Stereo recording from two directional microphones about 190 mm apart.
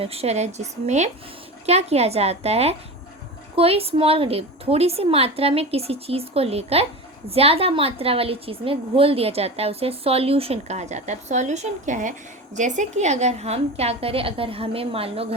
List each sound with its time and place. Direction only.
0.0 s a woman's voice: 30° right (ahead or behind)